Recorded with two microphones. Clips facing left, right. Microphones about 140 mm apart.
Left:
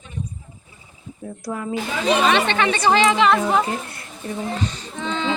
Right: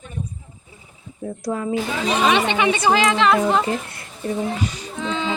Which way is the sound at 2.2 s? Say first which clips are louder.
Right 1 dB; 10° right (ahead or behind).